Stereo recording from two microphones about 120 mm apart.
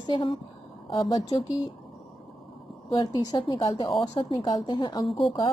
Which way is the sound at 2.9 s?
35° left (ahead or behind).